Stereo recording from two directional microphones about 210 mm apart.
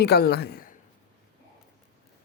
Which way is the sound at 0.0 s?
50° left (ahead or behind).